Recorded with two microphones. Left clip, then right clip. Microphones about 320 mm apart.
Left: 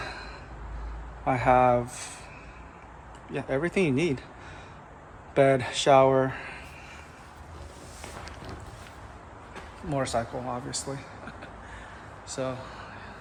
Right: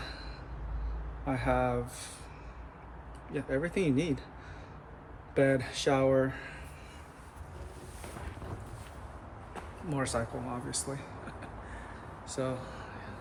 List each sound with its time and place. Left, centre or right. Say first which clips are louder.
0.0 s vehicle: left 7 dB; centre
1.2 s speech: left 9 dB; centre
3.3 s speech: left 5 dB; centre
5.3 s speech: left 6 dB; centre
9.9 s speech: left 5 dB; centre